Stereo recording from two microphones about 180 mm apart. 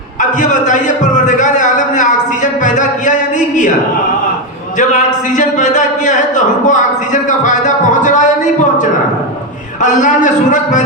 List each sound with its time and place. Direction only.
0.2 s a sound: 45° left (ahead or behind)
4.8 s a man's voice: 45° left (ahead or behind)
9.8 s a man's voice: 45° left (ahead or behind)